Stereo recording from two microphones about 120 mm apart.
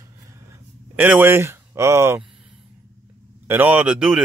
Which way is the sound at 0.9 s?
15° right (ahead or behind).